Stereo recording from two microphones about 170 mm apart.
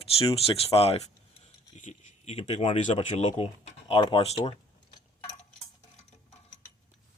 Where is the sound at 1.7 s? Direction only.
45° left (ahead or behind).